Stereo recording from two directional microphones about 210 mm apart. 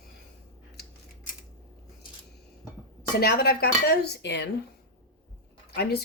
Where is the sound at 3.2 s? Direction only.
50° left (ahead or behind).